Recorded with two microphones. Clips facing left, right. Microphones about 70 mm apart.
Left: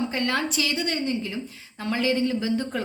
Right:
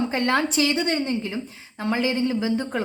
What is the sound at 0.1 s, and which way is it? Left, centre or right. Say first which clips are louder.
Speech: right 4 dB; right.